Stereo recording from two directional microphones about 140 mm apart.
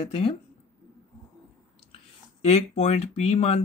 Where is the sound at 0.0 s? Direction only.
40° left (ahead or behind).